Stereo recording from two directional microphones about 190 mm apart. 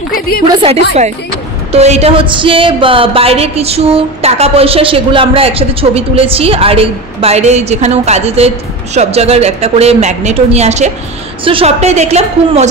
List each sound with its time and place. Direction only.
0.5 s a woman's voice: 30° right (ahead or behind)